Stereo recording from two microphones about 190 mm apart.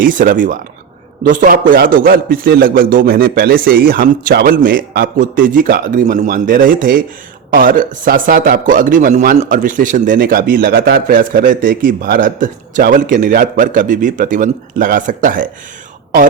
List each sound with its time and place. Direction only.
0.0 s a man's voice: 45° right (ahead or behind)